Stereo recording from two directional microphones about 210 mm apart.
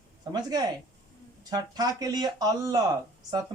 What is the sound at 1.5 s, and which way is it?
Speech, 20° right (ahead or behind).